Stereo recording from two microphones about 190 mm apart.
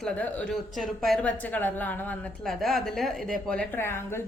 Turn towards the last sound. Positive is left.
turn(degrees=10)  # may be behind; listen again after turning